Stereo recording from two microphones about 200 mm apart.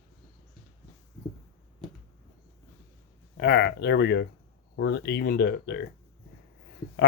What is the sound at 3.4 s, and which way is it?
Speech, 55° left (ahead or behind).